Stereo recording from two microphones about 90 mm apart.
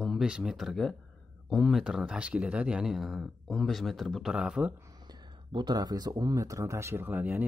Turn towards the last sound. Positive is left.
turn(degrees=-20)  # may be behind; listen again after turning